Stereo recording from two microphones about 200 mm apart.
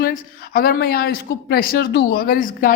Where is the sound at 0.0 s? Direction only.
45° left (ahead or behind).